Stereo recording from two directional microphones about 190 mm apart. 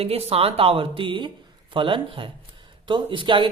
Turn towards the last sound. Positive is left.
turn(degrees=-25)  # may be behind; listen again after turning